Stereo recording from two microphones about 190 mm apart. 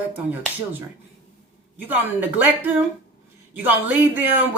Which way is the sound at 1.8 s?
10° right (ahead or behind).